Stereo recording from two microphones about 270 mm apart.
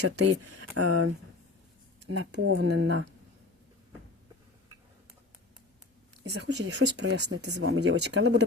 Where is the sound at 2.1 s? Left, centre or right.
Right.